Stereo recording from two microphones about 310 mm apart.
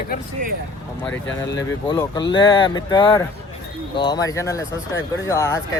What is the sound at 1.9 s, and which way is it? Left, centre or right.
A man's voice, centre.